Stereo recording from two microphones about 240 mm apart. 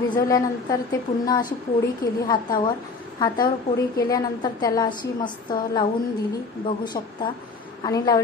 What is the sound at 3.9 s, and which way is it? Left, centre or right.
A woman's voice, centre.